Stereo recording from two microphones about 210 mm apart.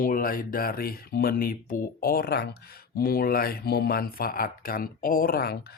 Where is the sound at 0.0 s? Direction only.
40° left (ahead or behind).